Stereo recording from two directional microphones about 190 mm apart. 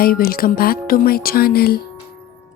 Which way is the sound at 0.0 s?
50° left (ahead or behind).